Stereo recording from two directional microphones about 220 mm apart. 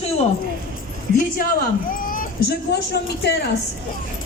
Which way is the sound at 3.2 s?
45° left (ahead or behind).